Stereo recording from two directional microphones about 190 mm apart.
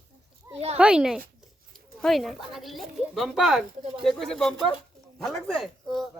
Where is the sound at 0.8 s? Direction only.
5° right (ahead or behind).